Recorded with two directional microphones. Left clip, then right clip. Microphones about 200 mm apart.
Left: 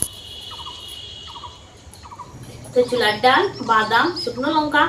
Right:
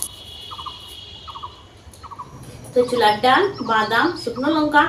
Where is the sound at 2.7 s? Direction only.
Centre (ahead or behind).